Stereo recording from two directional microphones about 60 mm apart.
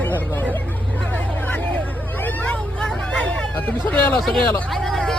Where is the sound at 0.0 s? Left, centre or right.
Left.